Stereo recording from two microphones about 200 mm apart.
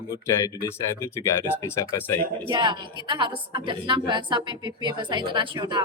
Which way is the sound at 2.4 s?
25° right (ahead or behind).